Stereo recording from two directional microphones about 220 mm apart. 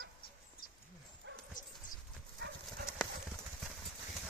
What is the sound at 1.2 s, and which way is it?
Dog, 55° right (ahead or behind).